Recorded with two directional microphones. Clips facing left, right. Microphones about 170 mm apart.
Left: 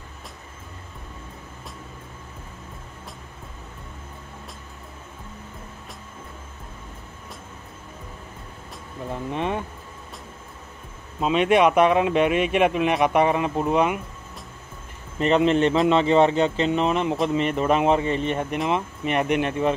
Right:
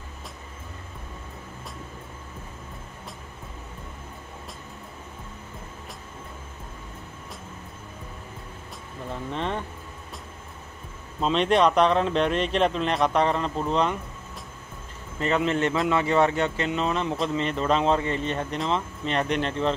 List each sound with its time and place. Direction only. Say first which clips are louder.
9.1 s speech: left 3 dB; 15° left (ahead or behind)
11.1 s speech: left 3 dB; 5° left (ahead or behind)
15.1 s speech: left 5 dB; 20° left (ahead or behind)